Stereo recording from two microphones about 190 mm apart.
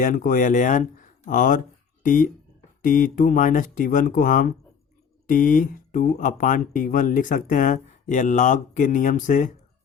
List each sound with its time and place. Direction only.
0.0 s speech: 45° left (ahead or behind)